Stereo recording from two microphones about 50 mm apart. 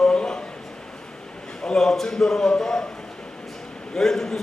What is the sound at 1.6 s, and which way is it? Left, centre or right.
A man's voice, centre.